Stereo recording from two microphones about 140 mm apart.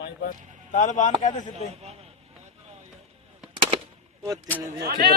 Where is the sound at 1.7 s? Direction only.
50° right (ahead or behind).